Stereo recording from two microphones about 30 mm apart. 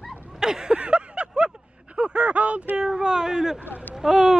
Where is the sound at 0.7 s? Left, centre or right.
Right.